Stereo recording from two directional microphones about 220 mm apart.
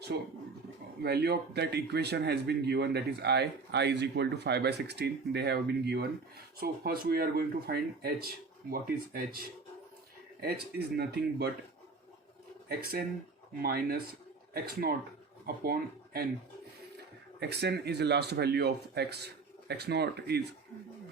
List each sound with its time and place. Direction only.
1.0 s speech: 45° right (ahead or behind)
10.4 s speech: 45° right (ahead or behind)
12.6 s speech: 45° right (ahead or behind)
17.4 s speech: 50° right (ahead or behind)